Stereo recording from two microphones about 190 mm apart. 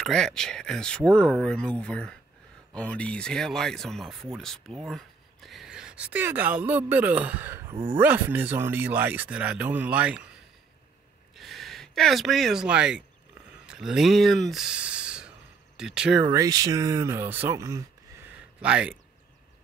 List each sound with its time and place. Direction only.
0.0 s speech: centre (ahead or behind)
7.7 s speech: 25° right (ahead or behind)
8.0 s speech: 10° right (ahead or behind)
11.3 s speech: centre (ahead or behind)
16.3 s speech: 20° right (ahead or behind)